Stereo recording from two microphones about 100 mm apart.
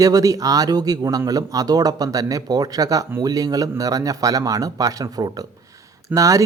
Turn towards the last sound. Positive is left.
turn(degrees=-30)  # may be behind; listen again after turning